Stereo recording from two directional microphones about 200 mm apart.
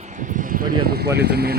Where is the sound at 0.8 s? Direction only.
50° right (ahead or behind).